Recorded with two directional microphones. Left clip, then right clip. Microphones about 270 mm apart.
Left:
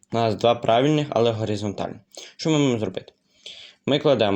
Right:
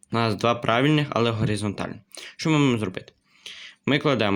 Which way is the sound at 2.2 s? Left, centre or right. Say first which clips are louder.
Left 1 dB; right.